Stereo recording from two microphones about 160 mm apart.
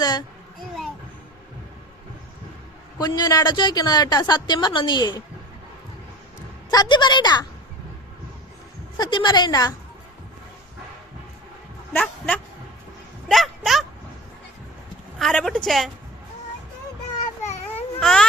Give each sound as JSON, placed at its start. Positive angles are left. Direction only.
{"t": 0.0, "sound": "a sound", "side_deg": 25}
{"t": 3.0, "sound": "a woman's voice", "side_deg": 25}
{"t": 6.7, "sound": "a woman's voice", "side_deg": 25}
{"t": 9.0, "sound": "a woman's voice", "side_deg": 30}
{"t": 11.9, "sound": "speech", "side_deg": 10}
{"t": 13.2, "sound": "a sound", "side_deg": 0}
{"t": 15.2, "sound": "a woman's voice", "side_deg": 5}
{"t": 18.0, "sound": "a woman's voice", "side_deg": 5}